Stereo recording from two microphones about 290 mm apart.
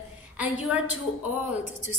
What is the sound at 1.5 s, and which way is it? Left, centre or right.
Speech, left.